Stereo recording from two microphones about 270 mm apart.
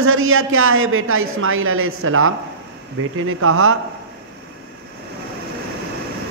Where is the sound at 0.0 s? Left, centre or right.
Right.